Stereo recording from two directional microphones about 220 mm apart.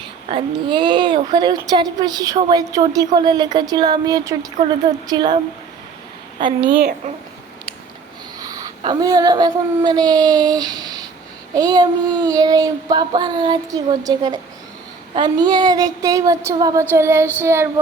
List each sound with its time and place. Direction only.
0.3 s speech: 20° right (ahead or behind)
6.4 s speech: 25° right (ahead or behind)
8.4 s speech: 15° right (ahead or behind)
11.5 s child singing: 15° right (ahead or behind)